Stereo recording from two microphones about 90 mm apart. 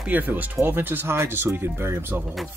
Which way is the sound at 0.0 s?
20° right (ahead or behind).